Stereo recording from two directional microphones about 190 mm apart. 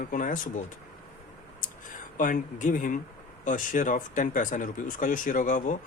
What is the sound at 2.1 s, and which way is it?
Speech, 45° left (ahead or behind).